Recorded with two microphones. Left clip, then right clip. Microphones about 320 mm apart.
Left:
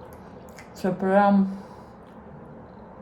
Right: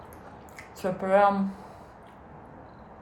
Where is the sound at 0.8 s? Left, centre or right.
Centre.